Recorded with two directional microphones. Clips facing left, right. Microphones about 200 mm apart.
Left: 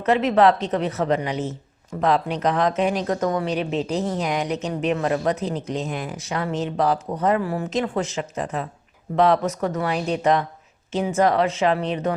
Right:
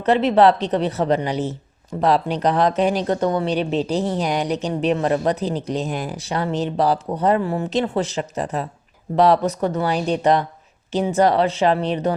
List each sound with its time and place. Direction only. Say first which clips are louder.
0.0 s speech: right 2 dB; 30° right (ahead or behind)